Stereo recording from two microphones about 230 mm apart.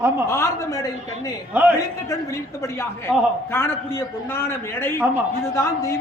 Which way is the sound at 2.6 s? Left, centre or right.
Centre.